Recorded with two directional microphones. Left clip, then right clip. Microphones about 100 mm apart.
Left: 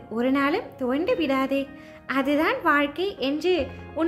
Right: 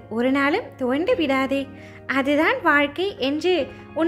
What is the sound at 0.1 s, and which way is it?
Speech, 35° right (ahead or behind).